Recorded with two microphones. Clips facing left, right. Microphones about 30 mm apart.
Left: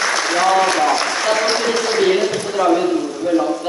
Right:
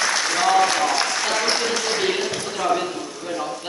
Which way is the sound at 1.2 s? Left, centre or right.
Centre.